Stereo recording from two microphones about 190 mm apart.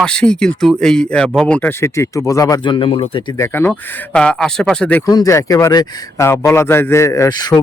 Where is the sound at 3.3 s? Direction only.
15° left (ahead or behind).